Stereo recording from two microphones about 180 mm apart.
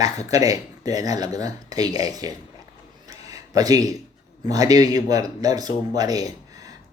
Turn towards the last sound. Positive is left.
turn(degrees=-20)  # may be behind; listen again after turning